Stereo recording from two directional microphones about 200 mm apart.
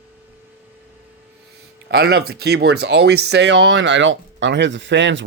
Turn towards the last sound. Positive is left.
turn(degrees=-65)  # may be behind; listen again after turning